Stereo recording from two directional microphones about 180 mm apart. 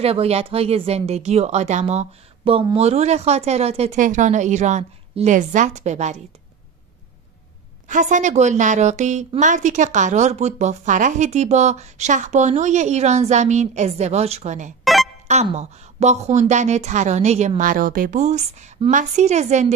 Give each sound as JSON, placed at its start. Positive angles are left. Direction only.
{"t": 0.0, "sound": "a woman's voice", "side_deg": -35}
{"t": 7.9, "sound": "a woman's voice", "side_deg": -45}